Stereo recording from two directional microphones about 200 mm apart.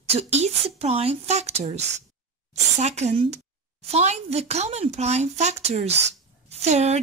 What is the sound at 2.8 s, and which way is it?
A woman's voice, 35° right (ahead or behind).